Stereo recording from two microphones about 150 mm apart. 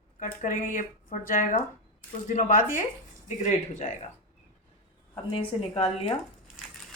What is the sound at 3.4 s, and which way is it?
Speech, 50° left (ahead or behind).